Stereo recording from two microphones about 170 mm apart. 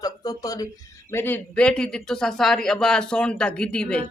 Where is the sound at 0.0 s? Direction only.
20° left (ahead or behind).